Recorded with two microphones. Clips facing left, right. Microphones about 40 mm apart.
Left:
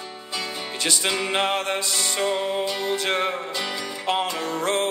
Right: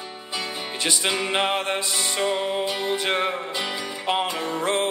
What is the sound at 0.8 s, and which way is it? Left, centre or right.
Music, centre.